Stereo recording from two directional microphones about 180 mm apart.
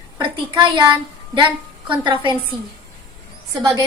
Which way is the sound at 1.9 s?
25° right (ahead or behind).